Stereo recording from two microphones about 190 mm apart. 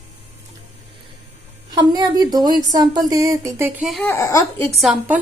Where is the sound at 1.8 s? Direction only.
20° right (ahead or behind); by 4.1 s centre (ahead or behind).